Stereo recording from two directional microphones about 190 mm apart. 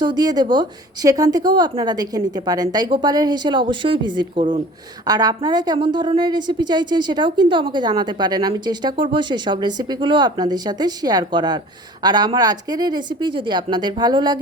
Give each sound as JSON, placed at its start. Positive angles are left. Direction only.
{"t": 0.0, "sound": "a woman's voice", "side_deg": -20}